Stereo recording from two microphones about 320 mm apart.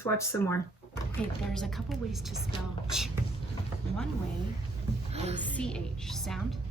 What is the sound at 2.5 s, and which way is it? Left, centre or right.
Speech, centre.